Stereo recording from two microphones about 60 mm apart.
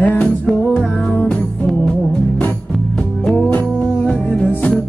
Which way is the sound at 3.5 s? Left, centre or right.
Left.